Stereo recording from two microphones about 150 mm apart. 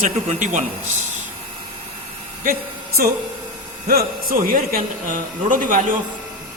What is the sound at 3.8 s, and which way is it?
A man's voice, 75° right (ahead or behind).